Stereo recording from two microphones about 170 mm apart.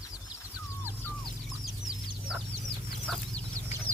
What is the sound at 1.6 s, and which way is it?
Chicken, 5° right (ahead or behind).